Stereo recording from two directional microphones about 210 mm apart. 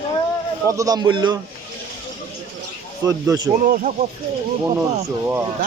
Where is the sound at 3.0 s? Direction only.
15° right (ahead or behind).